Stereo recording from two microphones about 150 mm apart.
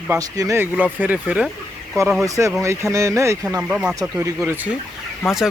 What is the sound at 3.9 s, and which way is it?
Speech, 20° right (ahead or behind).